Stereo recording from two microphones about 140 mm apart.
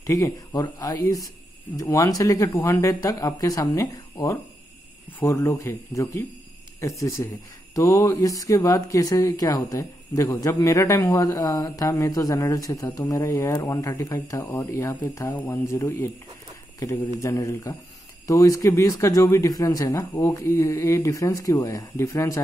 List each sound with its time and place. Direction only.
0.0 s speech: 20° left (ahead or behind)